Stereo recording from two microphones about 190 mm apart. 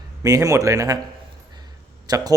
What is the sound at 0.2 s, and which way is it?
Speech, 20° right (ahead or behind).